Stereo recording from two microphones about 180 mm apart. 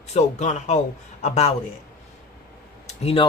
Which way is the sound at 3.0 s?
30° left (ahead or behind).